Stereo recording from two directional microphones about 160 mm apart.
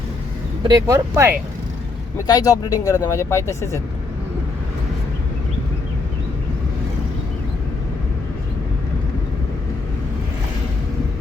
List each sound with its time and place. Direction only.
0.6 s speech: 20° right (ahead or behind)
2.2 s speech: 25° left (ahead or behind)